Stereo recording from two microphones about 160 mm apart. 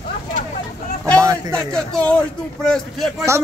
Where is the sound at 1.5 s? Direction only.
5° left (ahead or behind).